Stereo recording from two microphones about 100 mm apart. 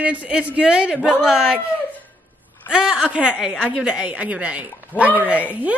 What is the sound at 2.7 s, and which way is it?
A woman's voice, 10° right (ahead or behind).